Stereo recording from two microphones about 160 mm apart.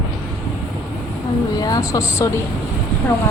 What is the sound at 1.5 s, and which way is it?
Speech, 25° left (ahead or behind).